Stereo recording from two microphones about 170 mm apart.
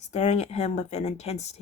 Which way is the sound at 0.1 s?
40° left (ahead or behind).